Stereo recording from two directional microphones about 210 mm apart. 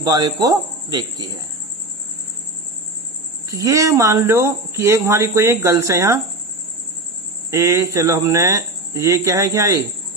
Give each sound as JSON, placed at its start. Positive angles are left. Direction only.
{"t": 0.0, "sound": "speech", "side_deg": -20}
{"t": 3.5, "sound": "speech", "side_deg": -15}
{"t": 7.5, "sound": "speech", "side_deg": -15}